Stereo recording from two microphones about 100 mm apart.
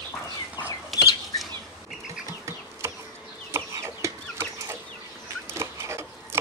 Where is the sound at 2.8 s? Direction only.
25° right (ahead or behind).